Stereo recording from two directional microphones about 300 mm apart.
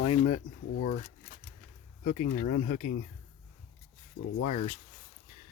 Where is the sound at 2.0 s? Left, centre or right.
Left.